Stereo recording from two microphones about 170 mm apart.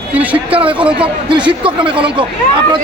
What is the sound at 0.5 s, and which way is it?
A man's voice, 30° right (ahead or behind).